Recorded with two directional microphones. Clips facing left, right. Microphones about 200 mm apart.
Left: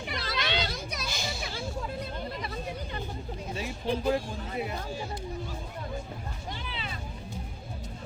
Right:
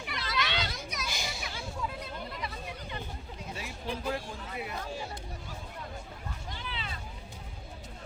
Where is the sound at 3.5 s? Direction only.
30° left (ahead or behind).